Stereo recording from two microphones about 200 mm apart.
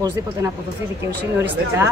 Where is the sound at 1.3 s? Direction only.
15° right (ahead or behind).